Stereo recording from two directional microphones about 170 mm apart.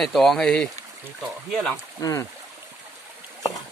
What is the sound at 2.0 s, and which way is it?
Speech, 20° left (ahead or behind).